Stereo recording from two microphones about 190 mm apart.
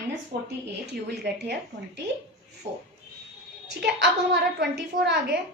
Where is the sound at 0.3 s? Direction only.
55° right (ahead or behind).